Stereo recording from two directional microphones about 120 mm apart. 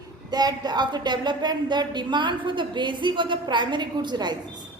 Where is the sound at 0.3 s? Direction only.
35° right (ahead or behind).